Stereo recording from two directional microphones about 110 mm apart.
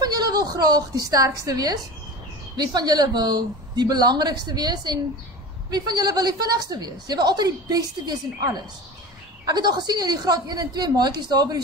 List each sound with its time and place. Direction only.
0.0 s a woman's voice: 40° right (ahead or behind)